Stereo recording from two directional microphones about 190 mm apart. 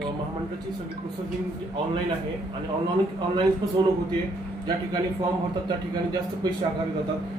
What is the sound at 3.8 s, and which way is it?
Speech, 25° right (ahead or behind).